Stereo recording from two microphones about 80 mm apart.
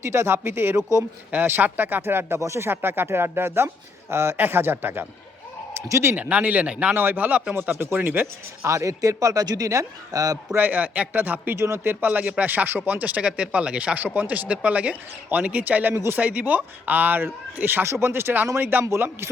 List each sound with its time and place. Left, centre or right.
0.0 s speech: right
6.1 s speech: centre
8.7 s a man's voice: right
10.5 s speech: right
11.5 s speech: right